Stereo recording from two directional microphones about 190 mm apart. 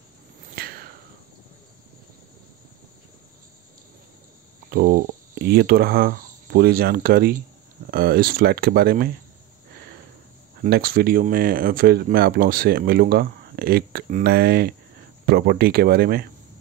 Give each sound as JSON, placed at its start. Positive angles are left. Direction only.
{"t": 0.6, "sound": "a sound", "side_deg": -50}
{"t": 4.6, "sound": "speech", "side_deg": -50}
{"t": 10.6, "sound": "speech", "side_deg": -50}